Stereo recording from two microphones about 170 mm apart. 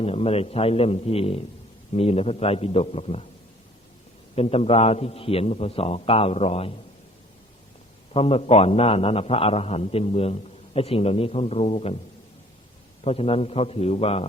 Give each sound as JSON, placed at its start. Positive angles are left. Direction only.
{"t": 0.0, "sound": "a man's voice", "side_deg": 35}
{"t": 4.4, "sound": "a man's voice", "side_deg": 35}
{"t": 8.1, "sound": "a man's voice", "side_deg": 35}
{"t": 13.1, "sound": "a man's voice", "side_deg": 35}